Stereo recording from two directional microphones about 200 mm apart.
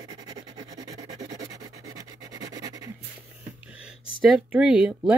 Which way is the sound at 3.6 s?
5° right (ahead or behind).